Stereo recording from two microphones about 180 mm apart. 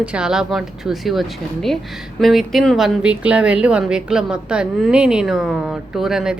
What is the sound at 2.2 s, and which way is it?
A woman's voice, centre (ahead or behind).